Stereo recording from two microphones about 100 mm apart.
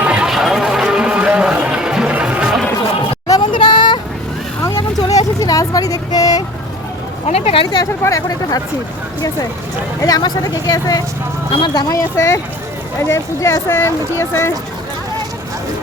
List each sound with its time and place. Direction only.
0.0 s run: 10° right (ahead or behind)
3.5 s a sound: 55° left (ahead or behind)
4.8 s a sound: 40° left (ahead or behind)
7.3 s speech: 85° left
8.0 s speech: 35° left (ahead or behind)
10.0 s speech: 40° left (ahead or behind)
11.9 s speech: 30° left (ahead or behind)